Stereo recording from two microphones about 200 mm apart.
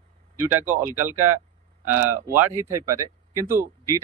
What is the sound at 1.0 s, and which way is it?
Speech, 10° right (ahead or behind).